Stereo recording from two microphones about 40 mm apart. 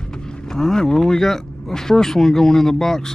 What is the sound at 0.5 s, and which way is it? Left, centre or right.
Speech, centre.